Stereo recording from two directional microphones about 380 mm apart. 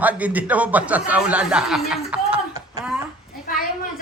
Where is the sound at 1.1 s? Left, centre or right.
Centre.